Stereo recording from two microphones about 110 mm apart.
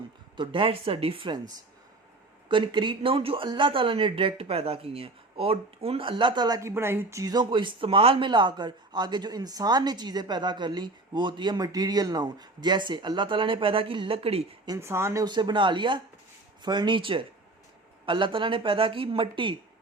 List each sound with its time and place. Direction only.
0.3 s speech: 50° right (ahead or behind)
2.5 s speech: 45° right (ahead or behind)
6.6 s speech: 25° right (ahead or behind); by 14.4 s 60° right (ahead or behind)
14.8 s speech: 25° right (ahead or behind)
15.2 s speech: 45° right (ahead or behind)